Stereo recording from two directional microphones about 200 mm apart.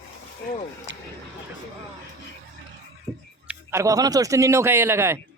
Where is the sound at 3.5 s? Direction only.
15° right (ahead or behind).